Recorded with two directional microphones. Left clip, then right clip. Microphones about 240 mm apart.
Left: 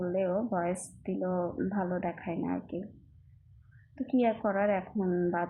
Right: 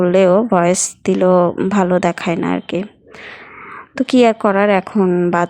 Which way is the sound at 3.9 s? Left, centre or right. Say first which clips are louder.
Right 17 dB; right.